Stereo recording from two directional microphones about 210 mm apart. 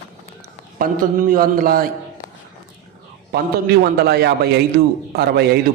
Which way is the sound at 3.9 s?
50° right (ahead or behind).